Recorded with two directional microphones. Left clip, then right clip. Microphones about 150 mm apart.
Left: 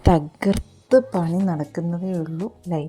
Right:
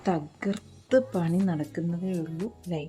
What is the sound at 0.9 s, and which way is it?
Speech, 25° left (ahead or behind).